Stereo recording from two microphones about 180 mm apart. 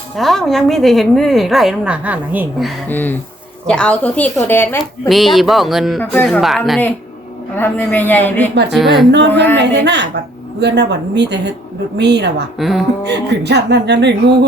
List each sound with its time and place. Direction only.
0.2 s a woman's voice: centre (ahead or behind)
2.9 s a woman's voice: 10° left (ahead or behind)
4.8 s a woman's voice: centre (ahead or behind)
9.1 s speech: 70° right (ahead or behind)
12.5 s a woman's voice: centre (ahead or behind)
13.1 s speech: 70° right (ahead or behind)